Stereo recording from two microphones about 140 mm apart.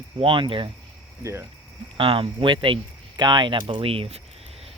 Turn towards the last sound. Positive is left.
turn(degrees=-45)  # may be behind; listen again after turning